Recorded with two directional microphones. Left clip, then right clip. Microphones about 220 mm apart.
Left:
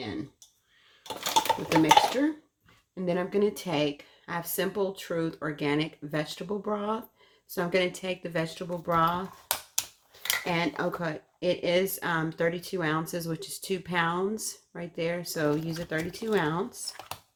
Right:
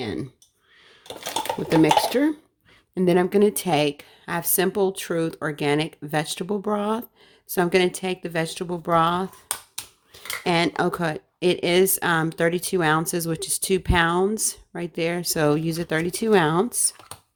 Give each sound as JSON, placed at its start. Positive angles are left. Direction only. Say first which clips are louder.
{"t": 0.0, "sound": "speech", "louder": "right 7 dB", "side_deg": -50}
{"t": 1.8, "sound": "speech", "louder": "right 3 dB", "side_deg": -45}
{"t": 10.4, "sound": "speech", "louder": "right 11 dB", "side_deg": -50}